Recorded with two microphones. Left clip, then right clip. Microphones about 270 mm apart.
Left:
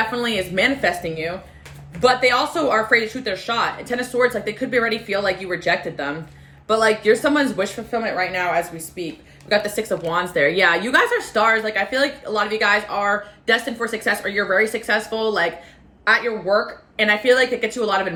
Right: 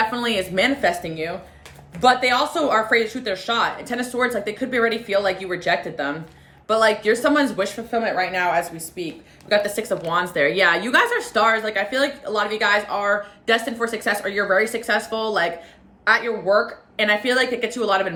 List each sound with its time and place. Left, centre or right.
0.0 s a woman's voice: centre